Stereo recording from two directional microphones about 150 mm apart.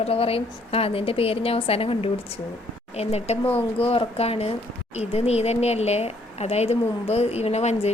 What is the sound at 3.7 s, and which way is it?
A woman's voice, 40° left (ahead or behind).